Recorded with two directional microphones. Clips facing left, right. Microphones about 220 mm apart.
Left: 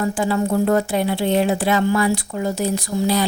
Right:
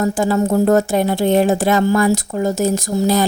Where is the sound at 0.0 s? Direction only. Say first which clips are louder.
Right 4 dB; 45° right (ahead or behind).